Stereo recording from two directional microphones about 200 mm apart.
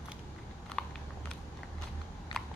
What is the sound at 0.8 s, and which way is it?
Biting, 5° left (ahead or behind).